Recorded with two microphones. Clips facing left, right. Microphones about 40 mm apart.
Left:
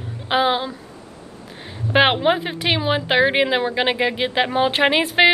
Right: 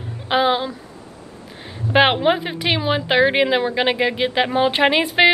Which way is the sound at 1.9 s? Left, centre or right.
Centre.